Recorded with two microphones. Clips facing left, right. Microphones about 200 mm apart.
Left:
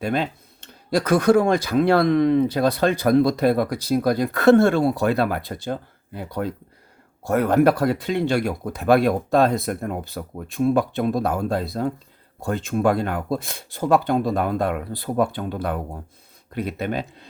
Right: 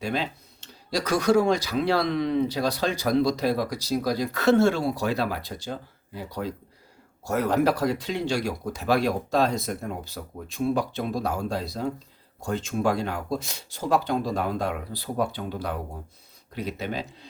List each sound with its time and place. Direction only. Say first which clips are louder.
0.0 s speech: left 5 dB; 55° left (ahead or behind)